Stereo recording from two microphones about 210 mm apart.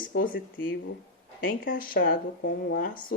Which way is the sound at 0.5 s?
60° left (ahead or behind).